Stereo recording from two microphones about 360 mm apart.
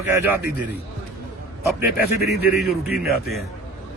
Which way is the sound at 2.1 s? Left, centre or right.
Left.